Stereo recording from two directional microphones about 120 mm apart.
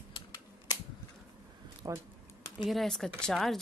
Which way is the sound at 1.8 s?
30° right (ahead or behind).